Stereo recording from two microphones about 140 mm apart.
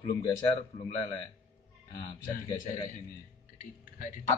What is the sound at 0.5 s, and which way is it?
Speech, 35° left (ahead or behind).